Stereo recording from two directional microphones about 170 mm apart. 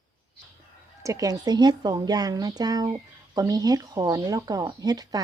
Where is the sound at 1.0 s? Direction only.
20° right (ahead or behind).